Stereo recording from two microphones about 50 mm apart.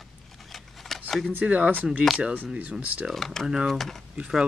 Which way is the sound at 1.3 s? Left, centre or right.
Right.